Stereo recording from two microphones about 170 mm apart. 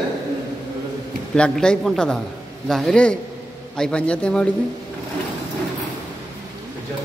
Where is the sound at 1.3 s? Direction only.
5° left (ahead or behind).